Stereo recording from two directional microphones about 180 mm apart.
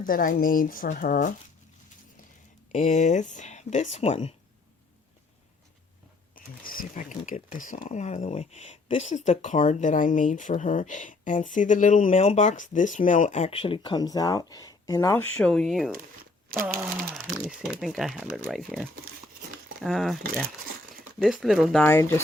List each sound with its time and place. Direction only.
0.0 s speech: 50° left (ahead or behind)
2.7 s speech: 40° left (ahead or behind)
6.3 s speech: 50° left (ahead or behind); by 15.9 s centre (ahead or behind)
17.5 s speech: centre (ahead or behind)